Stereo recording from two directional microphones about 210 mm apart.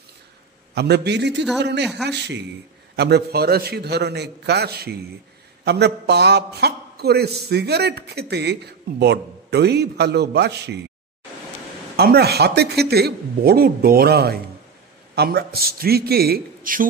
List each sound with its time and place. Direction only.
0.7 s a man's voice: 50° right (ahead or behind)
12.0 s a man's voice: 50° right (ahead or behind)